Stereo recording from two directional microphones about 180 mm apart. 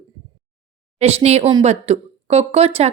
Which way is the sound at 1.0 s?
35° right (ahead or behind).